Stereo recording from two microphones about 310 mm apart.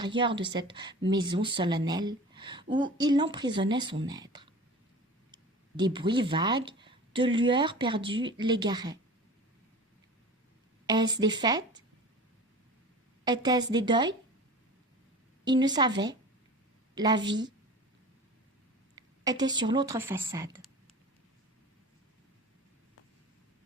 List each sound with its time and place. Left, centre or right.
0.0 s speech: centre
10.8 s speech: centre
13.2 s speech: centre
15.4 s speech: centre
18.9 s speech: centre